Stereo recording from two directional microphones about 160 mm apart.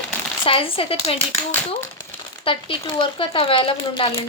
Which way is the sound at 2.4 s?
35° left (ahead or behind).